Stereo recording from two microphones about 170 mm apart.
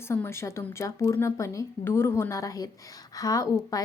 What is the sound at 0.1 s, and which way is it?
A woman's voice, 15° left (ahead or behind).